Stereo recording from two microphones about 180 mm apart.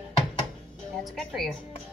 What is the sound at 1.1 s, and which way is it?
Speech, centre (ahead or behind).